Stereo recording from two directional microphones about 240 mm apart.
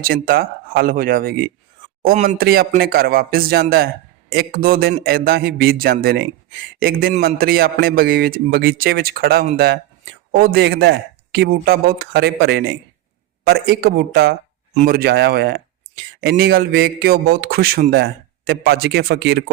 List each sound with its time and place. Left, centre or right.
0.0 s a man's voice: right